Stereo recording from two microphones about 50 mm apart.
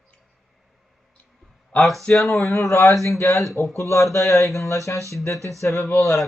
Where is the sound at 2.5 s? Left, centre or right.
Left.